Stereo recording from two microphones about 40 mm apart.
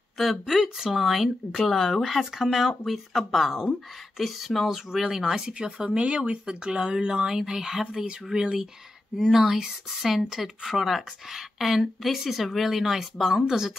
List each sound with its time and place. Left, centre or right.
0.2 s speech: centre